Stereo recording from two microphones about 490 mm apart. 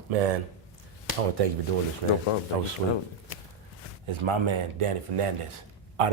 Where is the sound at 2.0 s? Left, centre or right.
Right.